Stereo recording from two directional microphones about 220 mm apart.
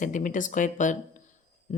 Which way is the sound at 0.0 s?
35° left (ahead or behind).